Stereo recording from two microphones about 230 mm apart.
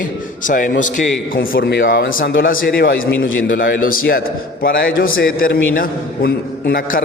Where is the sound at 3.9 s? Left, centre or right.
Left.